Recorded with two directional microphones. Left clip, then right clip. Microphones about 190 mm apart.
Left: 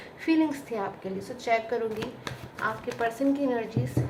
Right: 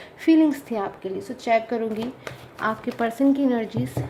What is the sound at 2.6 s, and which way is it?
A woman's voice, 50° right (ahead or behind).